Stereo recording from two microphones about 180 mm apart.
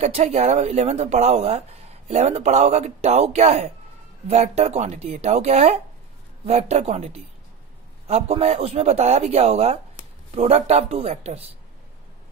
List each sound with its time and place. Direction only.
0.0 s speech: 35° right (ahead or behind)